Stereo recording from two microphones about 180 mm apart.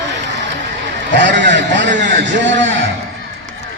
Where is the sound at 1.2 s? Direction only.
80° right.